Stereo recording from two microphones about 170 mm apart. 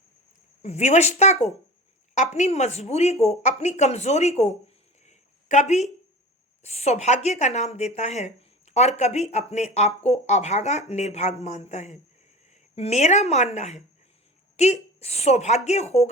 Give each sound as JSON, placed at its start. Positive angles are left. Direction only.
{"t": 0.6, "sound": "speech", "side_deg": 40}
{"t": 5.0, "sound": "a sound", "side_deg": 45}
{"t": 6.6, "sound": "speech", "side_deg": 40}